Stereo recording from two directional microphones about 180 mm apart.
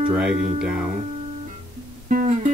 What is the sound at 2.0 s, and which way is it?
Music, 50° right (ahead or behind).